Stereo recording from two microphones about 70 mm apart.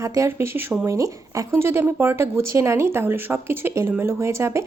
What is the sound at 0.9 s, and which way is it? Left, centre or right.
Speech, right.